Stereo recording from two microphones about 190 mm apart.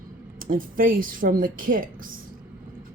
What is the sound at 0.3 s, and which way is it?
Speech, 45° right (ahead or behind).